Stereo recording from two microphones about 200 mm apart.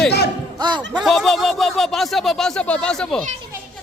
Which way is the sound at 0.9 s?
Centre (ahead or behind).